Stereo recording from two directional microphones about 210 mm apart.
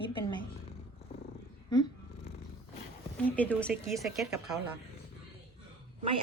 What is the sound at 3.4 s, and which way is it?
Speech, 5° left (ahead or behind).